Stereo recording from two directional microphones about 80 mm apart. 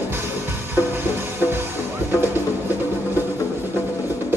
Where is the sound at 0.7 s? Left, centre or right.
Right.